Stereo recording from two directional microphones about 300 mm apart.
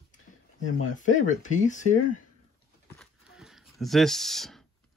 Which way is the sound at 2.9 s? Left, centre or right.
Centre.